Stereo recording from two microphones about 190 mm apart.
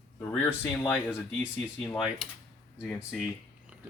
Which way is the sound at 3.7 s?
10° right (ahead or behind).